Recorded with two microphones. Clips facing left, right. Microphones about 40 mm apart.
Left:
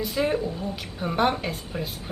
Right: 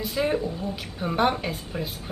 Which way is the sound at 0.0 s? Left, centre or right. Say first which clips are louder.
Even; centre.